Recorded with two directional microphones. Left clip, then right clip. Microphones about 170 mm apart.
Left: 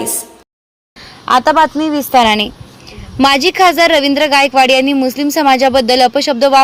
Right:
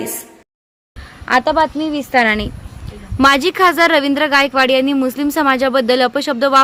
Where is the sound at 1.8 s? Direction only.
20° left (ahead or behind).